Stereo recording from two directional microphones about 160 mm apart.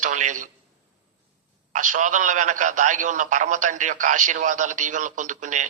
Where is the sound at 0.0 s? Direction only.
50° right (ahead or behind).